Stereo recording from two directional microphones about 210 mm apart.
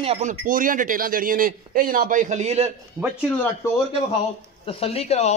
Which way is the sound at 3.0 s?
15° right (ahead or behind).